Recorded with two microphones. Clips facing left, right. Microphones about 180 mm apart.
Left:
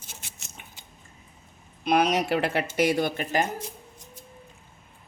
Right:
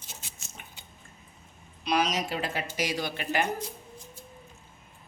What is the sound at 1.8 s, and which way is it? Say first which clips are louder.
Speech: left 5 dB; 55° left (ahead or behind).